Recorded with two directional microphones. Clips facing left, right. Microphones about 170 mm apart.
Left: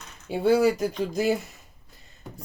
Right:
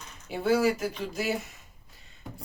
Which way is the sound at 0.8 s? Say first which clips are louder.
Left 6 dB; 35° left (ahead or behind).